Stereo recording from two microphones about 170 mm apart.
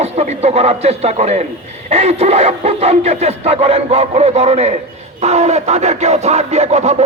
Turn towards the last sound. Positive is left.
turn(degrees=-40)  # may be behind; listen again after turning